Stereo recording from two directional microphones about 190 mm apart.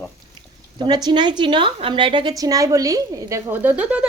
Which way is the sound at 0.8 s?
20° right (ahead or behind).